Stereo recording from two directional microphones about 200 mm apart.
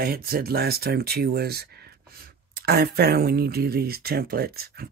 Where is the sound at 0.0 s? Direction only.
50° right (ahead or behind).